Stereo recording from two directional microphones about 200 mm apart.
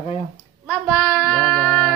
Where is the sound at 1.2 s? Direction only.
5° left (ahead or behind).